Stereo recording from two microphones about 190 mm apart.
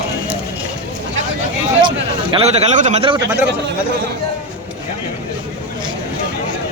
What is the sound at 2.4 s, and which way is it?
Speech, 35° right (ahead or behind).